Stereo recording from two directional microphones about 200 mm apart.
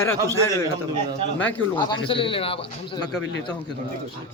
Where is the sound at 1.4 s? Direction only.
10° left (ahead or behind).